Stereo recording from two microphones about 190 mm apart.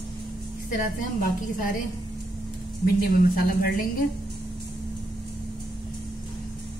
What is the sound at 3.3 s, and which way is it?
Speech, 50° left (ahead or behind).